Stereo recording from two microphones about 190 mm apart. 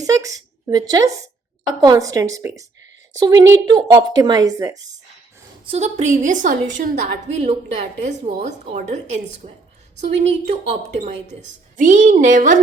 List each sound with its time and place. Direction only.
0.0 s a sound: 15° right (ahead or behind)
0.7 s a woman's voice: 20° right (ahead or behind)
5.6 s a woman's voice: 35° right (ahead or behind)